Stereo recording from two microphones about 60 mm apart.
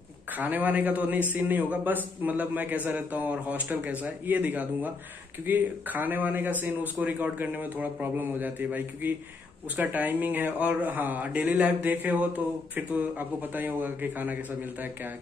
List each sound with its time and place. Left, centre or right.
0.3 s a man's voice: right